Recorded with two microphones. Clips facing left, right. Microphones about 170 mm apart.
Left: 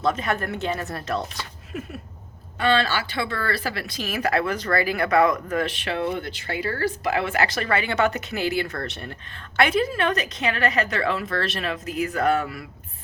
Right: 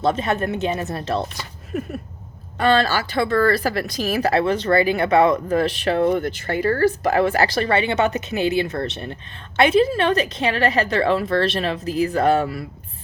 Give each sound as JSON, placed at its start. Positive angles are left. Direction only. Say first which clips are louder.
{"t": 0.0, "sound": "speech", "louder": "right 4 dB", "side_deg": -25}
{"t": 1.7, "sound": "a sound", "louder": "right 7 dB", "side_deg": -45}
{"t": 2.6, "sound": "speech", "louder": "right 4 dB", "side_deg": -40}